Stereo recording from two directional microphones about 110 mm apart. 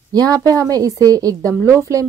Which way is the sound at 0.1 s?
35° right (ahead or behind).